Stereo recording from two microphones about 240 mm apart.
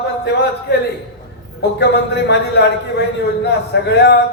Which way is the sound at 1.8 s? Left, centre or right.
Left.